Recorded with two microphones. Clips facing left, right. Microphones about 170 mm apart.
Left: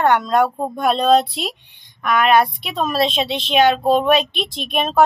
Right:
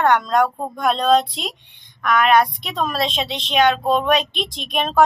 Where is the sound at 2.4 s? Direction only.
Centre (ahead or behind).